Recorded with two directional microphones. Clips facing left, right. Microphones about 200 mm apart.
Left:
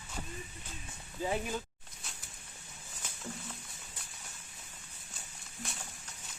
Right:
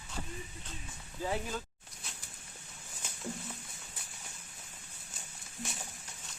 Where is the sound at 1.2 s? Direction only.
15° left (ahead or behind).